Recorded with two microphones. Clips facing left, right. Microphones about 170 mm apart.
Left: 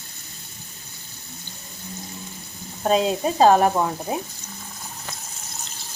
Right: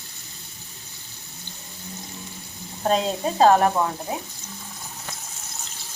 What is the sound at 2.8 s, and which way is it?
Frying, centre (ahead or behind).